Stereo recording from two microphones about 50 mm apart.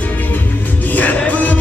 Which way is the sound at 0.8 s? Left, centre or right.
Left.